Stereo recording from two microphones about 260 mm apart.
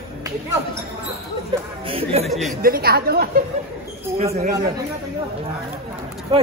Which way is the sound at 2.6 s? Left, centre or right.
Right.